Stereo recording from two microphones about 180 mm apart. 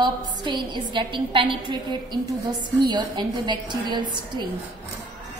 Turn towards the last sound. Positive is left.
turn(degrees=-25)  # may be behind; listen again after turning